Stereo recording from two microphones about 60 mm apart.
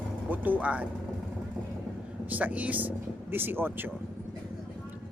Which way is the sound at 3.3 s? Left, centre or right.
Right.